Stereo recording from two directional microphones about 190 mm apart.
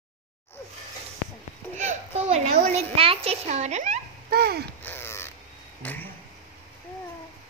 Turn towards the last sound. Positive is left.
turn(degrees=10)  # may be behind; listen again after turning